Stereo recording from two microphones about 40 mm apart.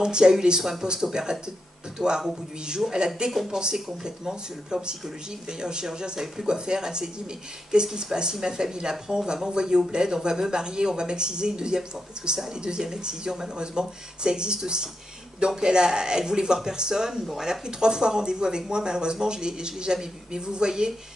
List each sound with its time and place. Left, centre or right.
0.0 s speech: centre
3.3 s speech: centre
4.0 s speech: centre